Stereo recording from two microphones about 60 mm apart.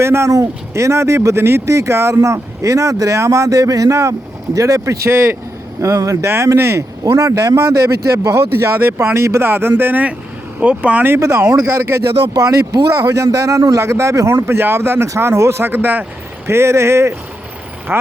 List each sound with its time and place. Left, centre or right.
0.0 s speech: right
0.3 s speech: right
1.6 s speech: right
5.8 s speech: right
6.2 s speech: right
7.0 s speech: right
7.5 s speech: right
11.2 s speech: right
14.3 s speech: right
16.5 s speech: right